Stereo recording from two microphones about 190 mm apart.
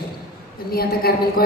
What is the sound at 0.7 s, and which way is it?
Speech, 50° left (ahead or behind).